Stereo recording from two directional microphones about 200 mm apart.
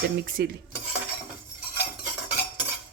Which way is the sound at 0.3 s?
50° right (ahead or behind).